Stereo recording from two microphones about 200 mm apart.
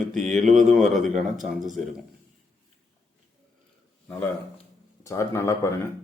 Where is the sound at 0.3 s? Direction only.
40° right (ahead or behind).